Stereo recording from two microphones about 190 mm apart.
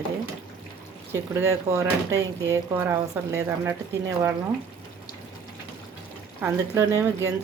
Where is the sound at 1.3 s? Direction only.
15° right (ahead or behind).